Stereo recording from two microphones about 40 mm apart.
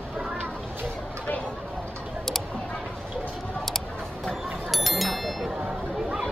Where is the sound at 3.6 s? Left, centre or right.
Centre.